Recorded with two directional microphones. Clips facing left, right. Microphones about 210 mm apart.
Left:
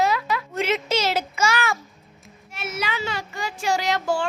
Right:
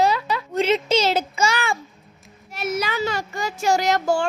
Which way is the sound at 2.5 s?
40° right (ahead or behind).